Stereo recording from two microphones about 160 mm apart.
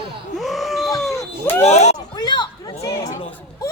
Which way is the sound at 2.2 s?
25° left (ahead or behind).